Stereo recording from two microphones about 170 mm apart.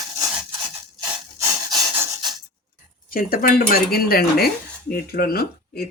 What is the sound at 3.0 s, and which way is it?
Speech, 60° left (ahead or behind).